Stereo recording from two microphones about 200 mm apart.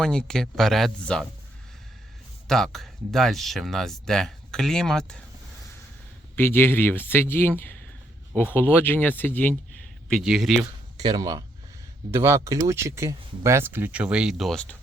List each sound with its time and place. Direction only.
0.0 s speech: 5° left (ahead or behind)
2.5 s speech: centre (ahead or behind)
6.3 s speech: 10° left (ahead or behind)
10.9 s speech: 20° right (ahead or behind); by 14.8 s 5° left (ahead or behind)